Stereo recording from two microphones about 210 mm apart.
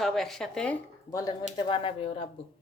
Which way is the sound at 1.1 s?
15° left (ahead or behind).